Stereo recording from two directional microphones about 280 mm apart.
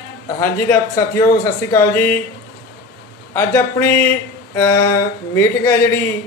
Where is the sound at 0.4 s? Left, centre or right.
Centre.